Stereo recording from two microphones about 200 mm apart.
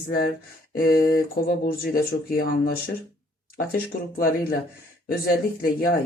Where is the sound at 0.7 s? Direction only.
45° left (ahead or behind).